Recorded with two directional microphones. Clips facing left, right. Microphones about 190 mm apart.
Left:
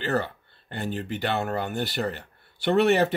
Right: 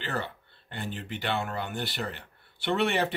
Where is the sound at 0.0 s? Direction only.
40° left (ahead or behind).